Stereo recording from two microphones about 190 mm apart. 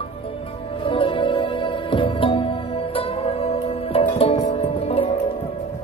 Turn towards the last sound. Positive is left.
turn(degrees=30)  # may be behind; listen again after turning